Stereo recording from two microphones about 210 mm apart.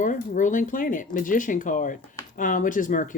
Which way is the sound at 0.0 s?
35° left (ahead or behind).